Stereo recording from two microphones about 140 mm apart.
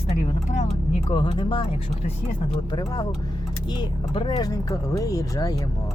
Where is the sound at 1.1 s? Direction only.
35° left (ahead or behind).